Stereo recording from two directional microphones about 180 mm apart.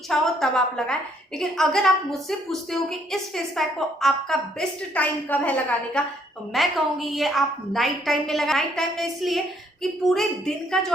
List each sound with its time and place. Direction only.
0.1 s a woman's voice: centre (ahead or behind)